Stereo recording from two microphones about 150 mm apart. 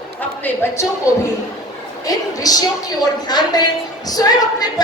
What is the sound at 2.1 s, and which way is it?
A woman's voice, 25° left (ahead or behind).